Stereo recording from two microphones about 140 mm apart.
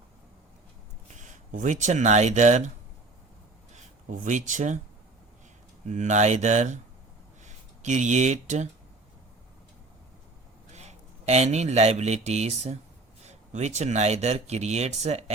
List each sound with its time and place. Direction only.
1.0 s speech: 60° right (ahead or behind)
4.1 s speech: 65° right (ahead or behind)
5.9 s speech: 60° right (ahead or behind)
10.7 s speech: 55° right (ahead or behind)